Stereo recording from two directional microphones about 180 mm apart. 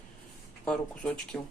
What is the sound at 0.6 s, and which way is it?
Speech, 5° left (ahead or behind).